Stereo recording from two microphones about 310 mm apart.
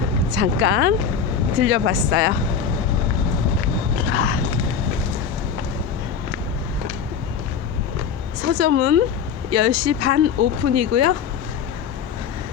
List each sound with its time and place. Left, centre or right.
0.3 s speech: right
4.1 s a sound: right
8.4 s speech: right